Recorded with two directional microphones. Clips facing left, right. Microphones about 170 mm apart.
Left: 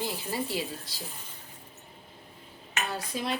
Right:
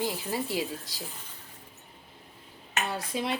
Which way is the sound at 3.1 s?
20° right (ahead or behind).